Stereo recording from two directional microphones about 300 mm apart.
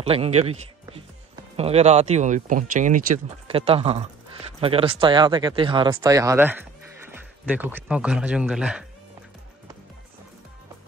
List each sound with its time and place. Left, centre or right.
0.0 s speech: centre